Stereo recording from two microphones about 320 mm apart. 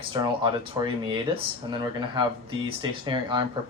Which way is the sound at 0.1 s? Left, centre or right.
Centre.